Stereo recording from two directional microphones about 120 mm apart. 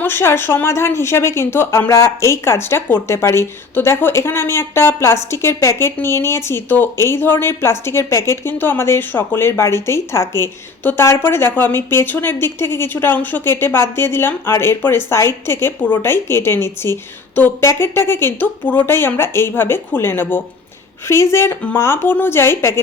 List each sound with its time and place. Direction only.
0.0 s a woman's voice: 20° left (ahead or behind)